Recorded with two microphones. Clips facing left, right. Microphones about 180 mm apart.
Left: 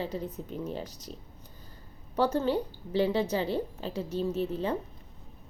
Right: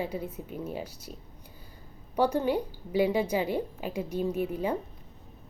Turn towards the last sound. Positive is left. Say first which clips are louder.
# right 1 dB
turn(degrees=-10)  # may be behind; listen again after turning